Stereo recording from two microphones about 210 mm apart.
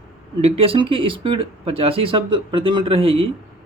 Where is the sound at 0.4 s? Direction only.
25° right (ahead or behind).